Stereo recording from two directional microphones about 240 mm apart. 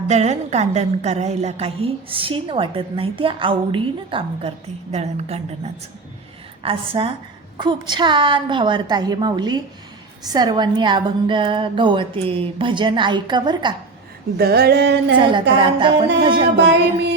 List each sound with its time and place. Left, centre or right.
0.1 s a woman's voice: right
14.3 s a sound: right
15.3 s a woman's voice: centre
16.6 s music: right